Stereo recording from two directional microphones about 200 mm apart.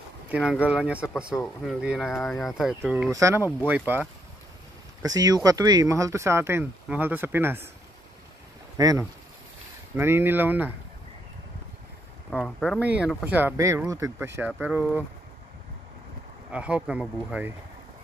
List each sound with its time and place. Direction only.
0.3 s speech: 5° right (ahead or behind)
3.1 s speech: 15° right (ahead or behind)
5.0 s speech: 20° right (ahead or behind)
8.7 s speech: 20° right (ahead or behind)
12.3 s speech: 5° left (ahead or behind)
16.5 s speech: 5° right (ahead or behind)